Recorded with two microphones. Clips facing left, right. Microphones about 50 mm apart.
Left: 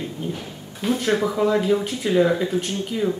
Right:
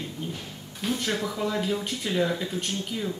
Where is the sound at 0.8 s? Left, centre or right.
Centre.